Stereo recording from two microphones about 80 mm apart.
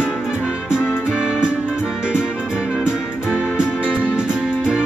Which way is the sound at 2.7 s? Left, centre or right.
Centre.